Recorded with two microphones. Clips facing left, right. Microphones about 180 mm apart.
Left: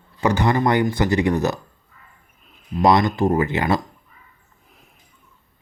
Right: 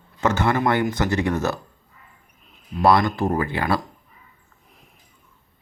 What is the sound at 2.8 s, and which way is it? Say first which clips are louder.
Speech: left 2 dB; 20° left (ahead or behind).